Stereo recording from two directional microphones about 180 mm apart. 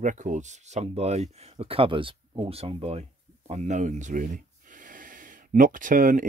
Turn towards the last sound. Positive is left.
turn(degrees=-45)  # may be behind; listen again after turning